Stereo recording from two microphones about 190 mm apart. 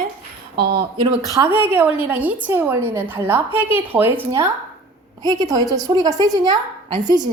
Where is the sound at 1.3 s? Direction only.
15° right (ahead or behind).